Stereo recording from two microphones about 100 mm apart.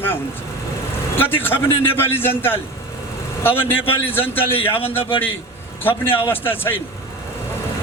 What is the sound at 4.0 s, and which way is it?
Speech, 20° left (ahead or behind).